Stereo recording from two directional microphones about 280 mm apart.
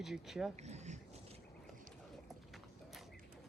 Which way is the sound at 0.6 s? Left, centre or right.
Right.